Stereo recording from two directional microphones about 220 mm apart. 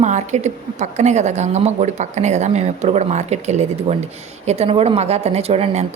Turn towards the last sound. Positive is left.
turn(degrees=-30)  # may be behind; listen again after turning